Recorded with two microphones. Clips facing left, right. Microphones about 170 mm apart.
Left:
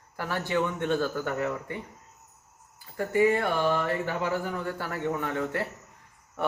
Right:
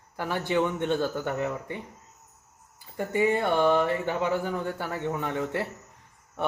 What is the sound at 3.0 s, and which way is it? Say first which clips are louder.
Speech: left 1 dB; 20° right (ahead or behind).